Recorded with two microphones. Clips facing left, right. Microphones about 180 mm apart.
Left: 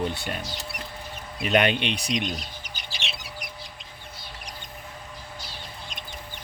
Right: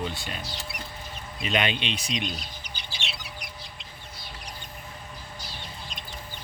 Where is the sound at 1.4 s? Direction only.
55° left (ahead or behind).